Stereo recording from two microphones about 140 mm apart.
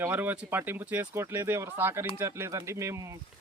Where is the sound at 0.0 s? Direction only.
15° right (ahead or behind).